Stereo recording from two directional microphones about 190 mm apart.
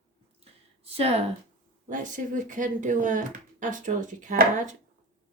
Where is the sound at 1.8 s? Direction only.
45° right (ahead or behind).